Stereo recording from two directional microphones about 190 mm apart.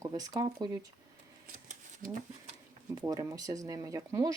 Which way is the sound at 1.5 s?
40° right (ahead or behind).